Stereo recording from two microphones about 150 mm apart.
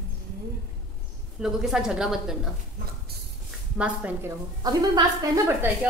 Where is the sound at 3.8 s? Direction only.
10° right (ahead or behind).